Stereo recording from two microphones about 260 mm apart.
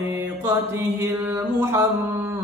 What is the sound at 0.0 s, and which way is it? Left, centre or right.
Mantra, centre.